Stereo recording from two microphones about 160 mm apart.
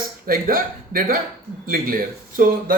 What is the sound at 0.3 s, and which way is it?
Speech, 65° right (ahead or behind).